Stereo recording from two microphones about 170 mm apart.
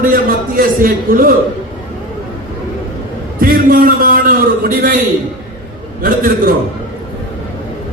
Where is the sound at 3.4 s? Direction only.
60° right (ahead or behind).